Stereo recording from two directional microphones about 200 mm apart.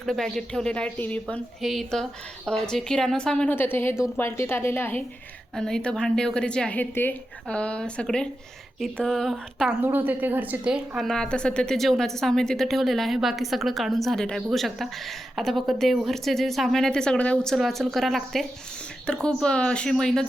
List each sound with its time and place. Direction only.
0.0 s a woman's voice: centre (ahead or behind)